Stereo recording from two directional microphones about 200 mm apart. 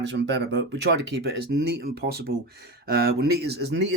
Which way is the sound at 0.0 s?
60° right (ahead or behind).